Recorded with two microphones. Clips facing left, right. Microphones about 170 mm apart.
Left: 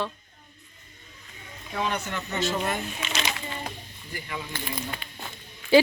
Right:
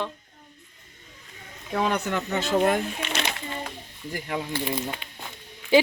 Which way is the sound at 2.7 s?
60° right (ahead or behind).